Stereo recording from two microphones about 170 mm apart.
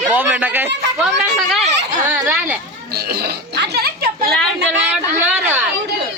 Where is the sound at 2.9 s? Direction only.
65° right (ahead or behind).